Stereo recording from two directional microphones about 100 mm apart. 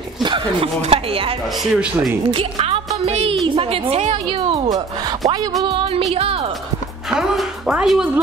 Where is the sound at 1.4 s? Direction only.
5° right (ahead or behind).